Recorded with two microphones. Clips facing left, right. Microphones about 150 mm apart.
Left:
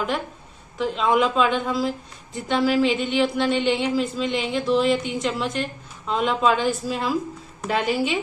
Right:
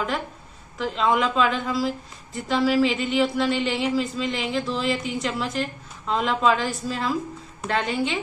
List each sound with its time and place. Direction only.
0.7 s speech: centre (ahead or behind)